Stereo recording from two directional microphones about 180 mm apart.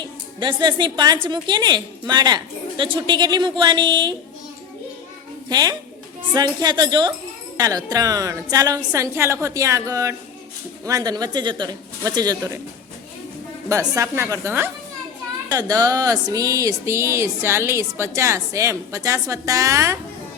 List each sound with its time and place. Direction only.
0.0 s a woman's voice: 25° right (ahead or behind)
5.5 s a woman's voice: 20° right (ahead or behind)
13.7 s speech: 15° right (ahead or behind)